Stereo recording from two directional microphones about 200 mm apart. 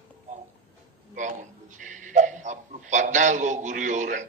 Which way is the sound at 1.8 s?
40° right (ahead or behind).